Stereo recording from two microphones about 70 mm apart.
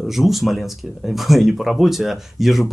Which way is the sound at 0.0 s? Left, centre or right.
Centre.